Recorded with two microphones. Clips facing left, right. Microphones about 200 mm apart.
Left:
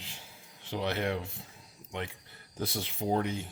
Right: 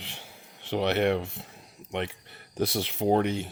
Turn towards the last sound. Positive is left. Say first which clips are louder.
# right 6 dB
turn(degrees=-75)  # may be behind; listen again after turning